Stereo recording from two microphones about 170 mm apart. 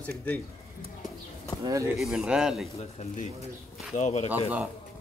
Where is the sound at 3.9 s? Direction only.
40° left (ahead or behind).